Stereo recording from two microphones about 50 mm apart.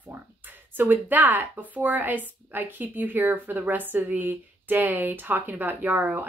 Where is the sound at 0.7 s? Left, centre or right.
Right.